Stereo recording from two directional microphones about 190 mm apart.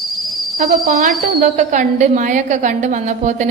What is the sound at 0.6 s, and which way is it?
A woman's voice, 40° right (ahead or behind).